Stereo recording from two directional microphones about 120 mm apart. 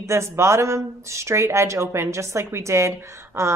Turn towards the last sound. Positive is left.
turn(degrees=-25)  # may be behind; listen again after turning